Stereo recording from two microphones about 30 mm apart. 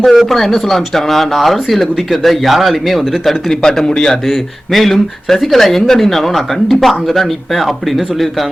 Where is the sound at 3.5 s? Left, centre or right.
Centre.